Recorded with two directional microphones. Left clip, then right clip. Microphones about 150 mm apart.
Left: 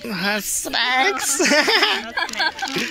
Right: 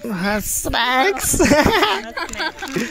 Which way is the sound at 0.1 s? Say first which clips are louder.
Even; 55° right (ahead or behind).